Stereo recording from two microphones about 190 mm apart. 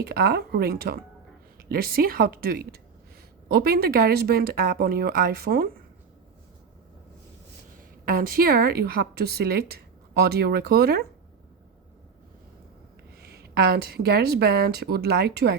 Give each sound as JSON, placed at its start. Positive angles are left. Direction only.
{"t": 0.0, "sound": "a woman's voice", "side_deg": -55}
{"t": 8.0, "sound": "a woman's voice", "side_deg": -50}
{"t": 13.2, "sound": "a woman's voice", "side_deg": -55}